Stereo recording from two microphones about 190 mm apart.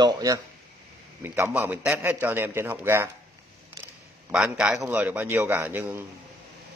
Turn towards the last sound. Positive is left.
turn(degrees=-10)  # may be behind; listen again after turning